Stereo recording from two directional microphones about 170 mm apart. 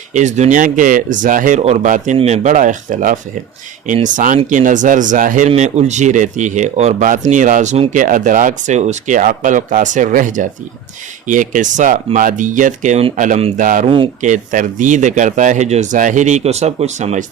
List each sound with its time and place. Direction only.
0.1 s speech: 45° right (ahead or behind)
13.1 s speech: 50° right (ahead or behind)
13.8 s speech: 30° right (ahead or behind)
14.2 s speech: 50° right (ahead or behind)